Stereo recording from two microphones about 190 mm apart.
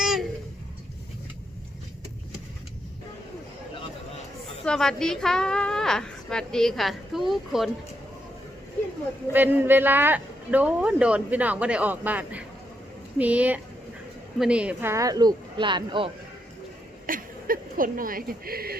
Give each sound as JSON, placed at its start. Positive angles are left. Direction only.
{"t": 0.0, "sound": "a sound", "side_deg": 0}
{"t": 4.6, "sound": "a woman's voice", "side_deg": 5}
{"t": 9.3, "sound": "a man's voice", "side_deg": -10}
{"t": 17.1, "sound": "speech", "side_deg": -45}